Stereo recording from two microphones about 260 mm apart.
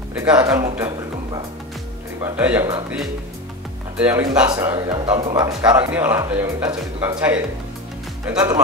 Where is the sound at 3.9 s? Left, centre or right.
Centre.